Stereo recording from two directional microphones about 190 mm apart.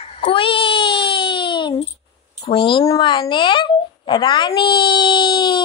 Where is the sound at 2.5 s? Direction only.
25° left (ahead or behind).